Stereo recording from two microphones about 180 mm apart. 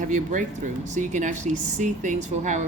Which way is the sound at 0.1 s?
45° right (ahead or behind).